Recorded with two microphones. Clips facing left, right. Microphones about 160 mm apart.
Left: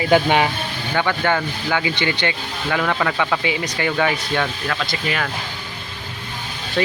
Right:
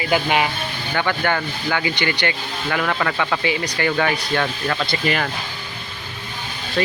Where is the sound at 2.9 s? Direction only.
5° left (ahead or behind).